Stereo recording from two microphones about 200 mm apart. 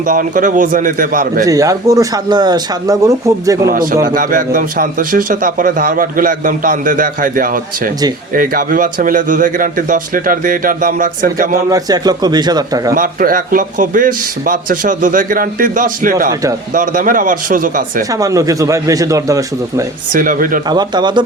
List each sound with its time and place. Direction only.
0.0 s a man's voice: 40° right (ahead or behind)
1.5 s speech: 15° right (ahead or behind)
4.0 s a man's voice: 45° right (ahead or behind)
11.5 s a man's voice: 20° right (ahead or behind)
12.9 s a man's voice: 45° right (ahead or behind)
16.3 s speech: 15° right (ahead or behind)
16.7 s a man's voice: 40° right (ahead or behind)
18.1 s speech: 15° right (ahead or behind)
20.1 s a man's voice: 45° right (ahead or behind)
20.7 s a man's voice: 20° right (ahead or behind)